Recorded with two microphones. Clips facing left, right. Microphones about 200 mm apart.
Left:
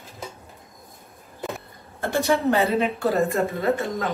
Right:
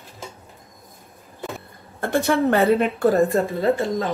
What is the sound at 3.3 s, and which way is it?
Speech, 30° right (ahead or behind).